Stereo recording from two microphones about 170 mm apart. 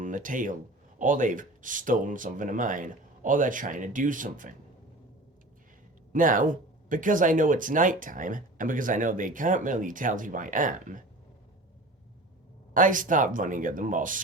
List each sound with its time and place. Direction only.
0.0 s speech: 50° right (ahead or behind)
6.1 s speech: 50° right (ahead or behind)
12.7 s speech: 50° right (ahead or behind)